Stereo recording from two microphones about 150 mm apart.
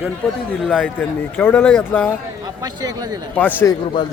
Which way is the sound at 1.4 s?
15° left (ahead or behind).